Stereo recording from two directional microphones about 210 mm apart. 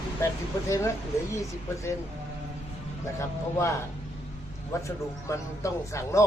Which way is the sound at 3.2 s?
15° left (ahead or behind).